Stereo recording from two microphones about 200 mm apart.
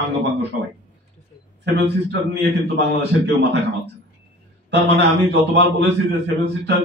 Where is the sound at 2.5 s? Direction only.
60° right (ahead or behind).